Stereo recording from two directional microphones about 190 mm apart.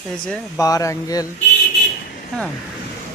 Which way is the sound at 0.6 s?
15° left (ahead or behind).